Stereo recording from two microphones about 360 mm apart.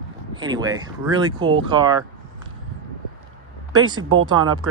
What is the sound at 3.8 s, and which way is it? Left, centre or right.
Speech, right.